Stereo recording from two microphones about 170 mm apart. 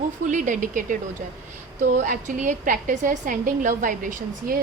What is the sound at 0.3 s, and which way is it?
A woman's voice, 50° right (ahead or behind).